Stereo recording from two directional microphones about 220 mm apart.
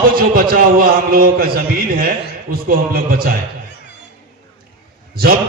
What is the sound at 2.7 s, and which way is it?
Speech, 40° right (ahead or behind).